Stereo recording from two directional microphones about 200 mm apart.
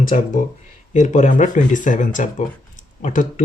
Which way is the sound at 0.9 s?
35° left (ahead or behind).